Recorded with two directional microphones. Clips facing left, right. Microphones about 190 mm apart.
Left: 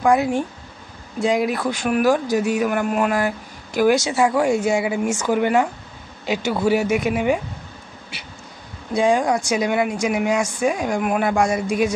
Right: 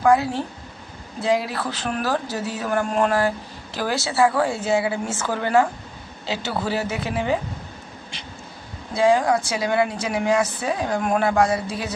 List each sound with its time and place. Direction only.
0.0 s a man's voice: 15° left (ahead or behind)
8.1 s a sound: 10° left (ahead or behind)
8.9 s a man's voice: 15° left (ahead or behind)